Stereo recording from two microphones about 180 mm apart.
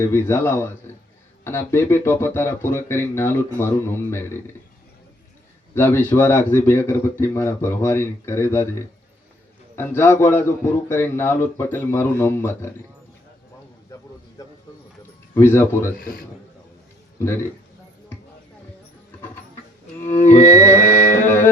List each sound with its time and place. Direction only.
0.0 s speech: 15° left (ahead or behind)
5.7 s speech: 15° left (ahead or behind)
9.7 s speech: 15° left (ahead or behind)
14.4 s a sound: 15° left (ahead or behind)
15.4 s speech: 15° left (ahead or behind)
16.0 s speech: 55° left (ahead or behind)
17.2 s a man's voice: 15° left (ahead or behind)
20.1 s music: 40° left (ahead or behind)
21.2 s speech: 10° left (ahead or behind)